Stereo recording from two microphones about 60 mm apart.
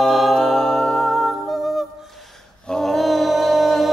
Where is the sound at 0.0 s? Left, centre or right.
Centre.